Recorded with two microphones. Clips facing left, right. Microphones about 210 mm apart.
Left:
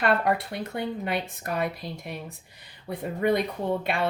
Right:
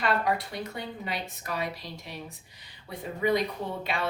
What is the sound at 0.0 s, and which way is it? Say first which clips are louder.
Speech: left 3 dB; 55° left (ahead or behind).